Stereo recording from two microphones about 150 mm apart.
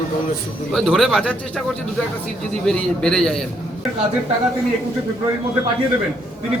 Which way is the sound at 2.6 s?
5° left (ahead or behind).